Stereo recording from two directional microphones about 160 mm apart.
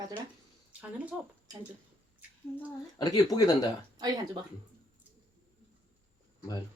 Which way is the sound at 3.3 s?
25° left (ahead or behind).